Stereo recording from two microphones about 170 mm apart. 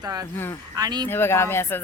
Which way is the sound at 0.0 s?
20° right (ahead or behind).